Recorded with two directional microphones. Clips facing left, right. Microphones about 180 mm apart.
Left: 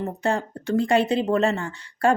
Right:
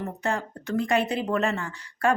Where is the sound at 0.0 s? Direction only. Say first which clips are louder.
Left 4 dB; 30° left (ahead or behind).